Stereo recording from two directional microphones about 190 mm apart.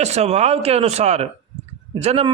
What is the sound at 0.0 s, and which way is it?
A man's voice, 35° right (ahead or behind).